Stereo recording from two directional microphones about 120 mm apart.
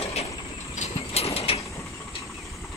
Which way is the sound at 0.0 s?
60° left (ahead or behind).